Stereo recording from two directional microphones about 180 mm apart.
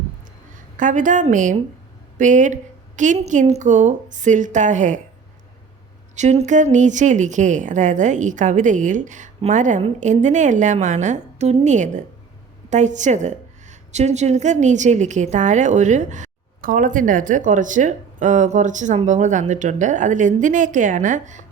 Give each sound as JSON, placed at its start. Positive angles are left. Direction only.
{"t": 0.8, "sound": "a woman's voice", "side_deg": -45}
{"t": 6.1, "sound": "a woman's voice", "side_deg": -40}